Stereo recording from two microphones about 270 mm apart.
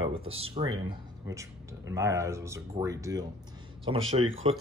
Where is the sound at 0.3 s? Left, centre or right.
Right.